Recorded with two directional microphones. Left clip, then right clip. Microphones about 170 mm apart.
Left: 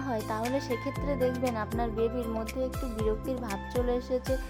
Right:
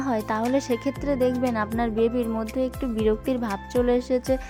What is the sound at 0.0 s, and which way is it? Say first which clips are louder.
Speech: right 6 dB; 30° right (ahead or behind).